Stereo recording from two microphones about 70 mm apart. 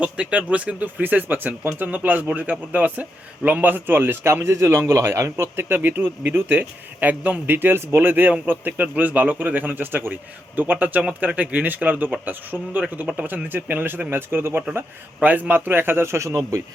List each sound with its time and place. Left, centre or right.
0.0 s a man's voice: centre; by 16.4 s right